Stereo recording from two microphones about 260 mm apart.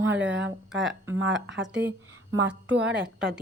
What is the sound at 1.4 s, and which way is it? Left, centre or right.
Speech, right.